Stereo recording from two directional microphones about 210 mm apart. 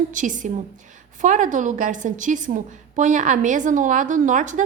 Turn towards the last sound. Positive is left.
turn(degrees=-35)  # may be behind; listen again after turning